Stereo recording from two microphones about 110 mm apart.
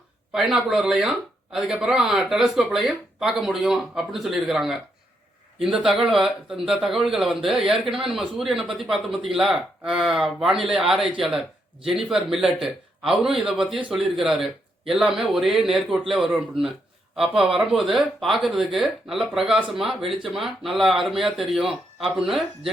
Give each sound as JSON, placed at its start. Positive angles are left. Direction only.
{"t": 0.3, "sound": "a man's voice", "side_deg": -5}